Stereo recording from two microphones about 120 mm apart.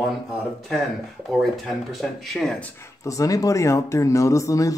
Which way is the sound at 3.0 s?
30° left (ahead or behind).